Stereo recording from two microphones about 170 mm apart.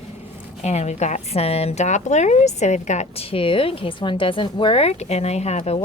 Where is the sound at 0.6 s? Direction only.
40° left (ahead or behind).